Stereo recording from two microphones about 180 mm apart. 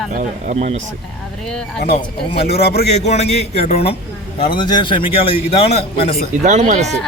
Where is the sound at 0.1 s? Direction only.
45° right (ahead or behind).